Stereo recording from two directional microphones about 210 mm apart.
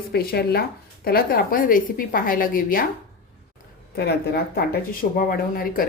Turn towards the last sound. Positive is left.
turn(degrees=45)  # may be behind; listen again after turning